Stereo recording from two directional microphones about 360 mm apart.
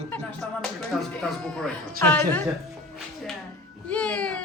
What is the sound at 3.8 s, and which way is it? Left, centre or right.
Speech, centre.